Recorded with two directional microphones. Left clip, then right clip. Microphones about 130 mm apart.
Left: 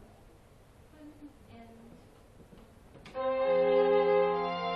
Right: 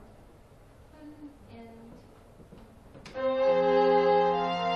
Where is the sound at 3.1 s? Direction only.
15° right (ahead or behind).